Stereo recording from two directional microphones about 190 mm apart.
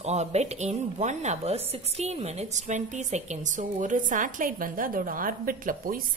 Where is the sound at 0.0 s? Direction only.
35° right (ahead or behind).